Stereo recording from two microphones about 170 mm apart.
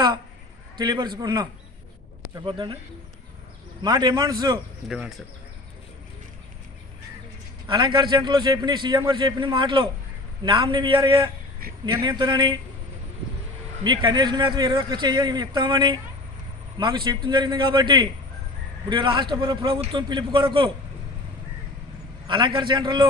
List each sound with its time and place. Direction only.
0.7 s a man's voice: 25° right (ahead or behind)
3.8 s a man's voice: 25° right (ahead or behind)
4.8 s speech: 5° right (ahead or behind)
7.6 s a man's voice: 30° right (ahead or behind)
13.8 s a man's voice: 25° right (ahead or behind)
22.3 s a man's voice: 30° right (ahead or behind)